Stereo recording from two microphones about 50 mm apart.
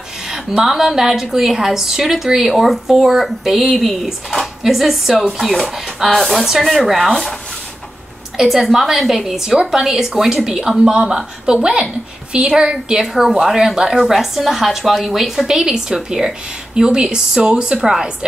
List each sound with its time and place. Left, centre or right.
0.3 s a woman's voice: centre
8.4 s a woman's voice: centre